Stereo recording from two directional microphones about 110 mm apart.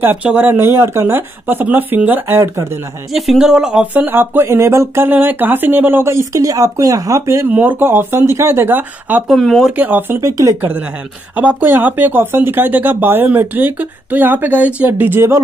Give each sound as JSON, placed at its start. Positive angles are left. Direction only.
{"t": 0.0, "sound": "speech", "side_deg": -15}
{"t": 3.1, "sound": "speech", "side_deg": 0}
{"t": 7.4, "sound": "speech", "side_deg": -15}
{"t": 9.3, "sound": "speech", "side_deg": 0}
{"t": 9.8, "sound": "speech", "side_deg": -15}
{"t": 10.2, "sound": "speech", "side_deg": -30}
{"t": 11.3, "sound": "speech", "side_deg": -15}